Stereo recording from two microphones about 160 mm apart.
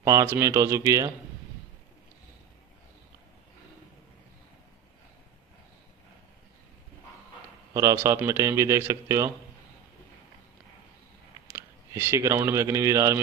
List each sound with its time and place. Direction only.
0.0 s speech: 15° right (ahead or behind)
7.7 s a man's voice: 15° right (ahead or behind)
11.5 s speech: 20° right (ahead or behind)